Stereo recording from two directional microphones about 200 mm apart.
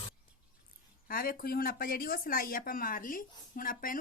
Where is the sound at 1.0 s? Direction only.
45° left (ahead or behind).